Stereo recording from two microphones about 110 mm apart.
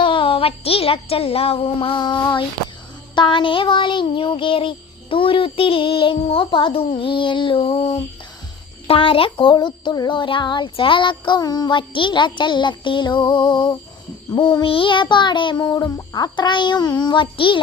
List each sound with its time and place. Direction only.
0.0 s a woman's voice: 50° left (ahead or behind)